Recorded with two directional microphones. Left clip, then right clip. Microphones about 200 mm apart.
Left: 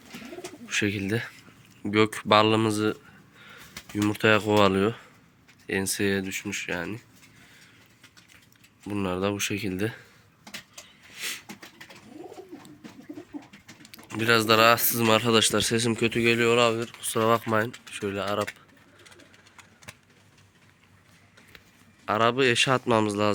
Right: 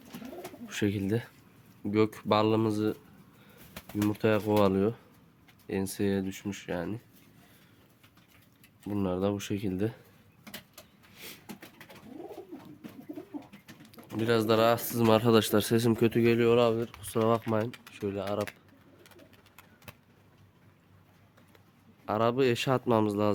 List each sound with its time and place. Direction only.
0.7 s speech: 15° right (ahead or behind)
8.9 s speech: 10° right (ahead or behind)
11.1 s a sound: 5° right (ahead or behind)
14.2 s speech: 10° right (ahead or behind)
22.0 s speech: 5° right (ahead or behind)